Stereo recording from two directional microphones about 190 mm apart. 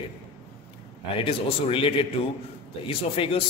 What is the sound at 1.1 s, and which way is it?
A man's voice, 30° left (ahead or behind).